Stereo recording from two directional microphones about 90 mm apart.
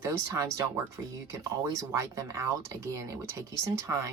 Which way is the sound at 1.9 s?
35° right (ahead or behind).